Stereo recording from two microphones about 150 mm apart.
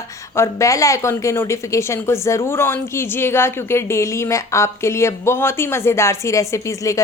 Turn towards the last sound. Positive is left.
turn(degrees=20)  # may be behind; listen again after turning